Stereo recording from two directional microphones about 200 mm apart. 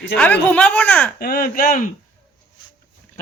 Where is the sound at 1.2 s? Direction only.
50° left (ahead or behind).